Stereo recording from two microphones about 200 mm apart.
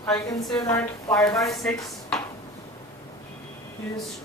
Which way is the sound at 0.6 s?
15° left (ahead or behind).